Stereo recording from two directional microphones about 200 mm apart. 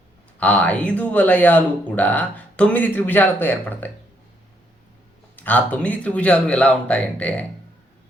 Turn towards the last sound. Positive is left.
turn(degrees=5)  # may be behind; listen again after turning